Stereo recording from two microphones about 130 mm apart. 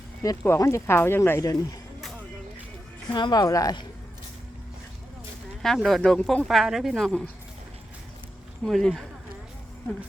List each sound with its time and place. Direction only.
0.2 s speech: 20° left (ahead or behind)
3.1 s speech: 35° left (ahead or behind)
5.6 s speech: centre (ahead or behind)
8.6 s speech: centre (ahead or behind)